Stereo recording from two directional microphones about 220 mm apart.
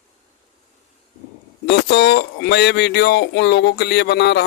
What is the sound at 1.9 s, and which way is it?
Speech, 50° left (ahead or behind).